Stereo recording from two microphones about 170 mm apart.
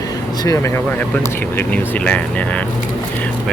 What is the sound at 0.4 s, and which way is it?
Speech, 20° left (ahead or behind).